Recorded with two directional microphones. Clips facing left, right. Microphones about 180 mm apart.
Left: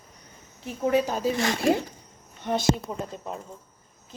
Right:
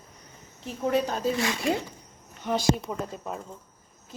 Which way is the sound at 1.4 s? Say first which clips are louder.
Left 4 dB; 45° left (ahead or behind).